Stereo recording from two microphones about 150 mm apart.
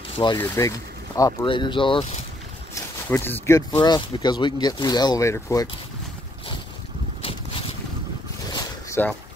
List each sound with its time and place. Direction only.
0.4 s speech: 20° left (ahead or behind)
1.4 s speech: 35° left (ahead or behind)
2.7 s speech: 15° left (ahead or behind)
3.7 s speech: 30° left (ahead or behind)
7.2 s boat: 40° left (ahead or behind)
9.0 s speech: 15° left (ahead or behind)